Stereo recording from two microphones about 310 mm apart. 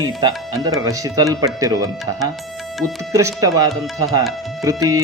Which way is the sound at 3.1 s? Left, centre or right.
Centre.